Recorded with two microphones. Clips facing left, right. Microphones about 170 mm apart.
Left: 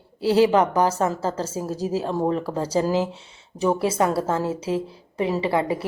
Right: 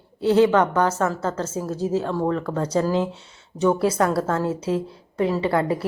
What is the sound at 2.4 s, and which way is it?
Speech, 30° left (ahead or behind).